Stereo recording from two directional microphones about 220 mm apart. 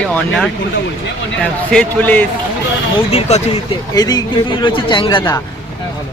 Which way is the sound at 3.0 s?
30° left (ahead or behind).